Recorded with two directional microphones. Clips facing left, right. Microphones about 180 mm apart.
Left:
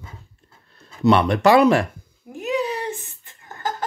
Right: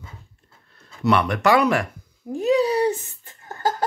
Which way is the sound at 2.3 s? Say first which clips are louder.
Right 5 dB; 35° right (ahead or behind).